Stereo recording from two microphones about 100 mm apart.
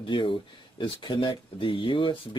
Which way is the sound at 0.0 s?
55° left (ahead or behind).